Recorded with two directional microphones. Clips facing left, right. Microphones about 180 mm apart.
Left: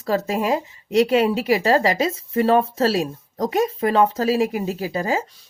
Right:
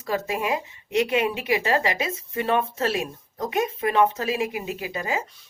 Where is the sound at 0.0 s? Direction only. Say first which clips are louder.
Left 5 dB; 35° left (ahead or behind).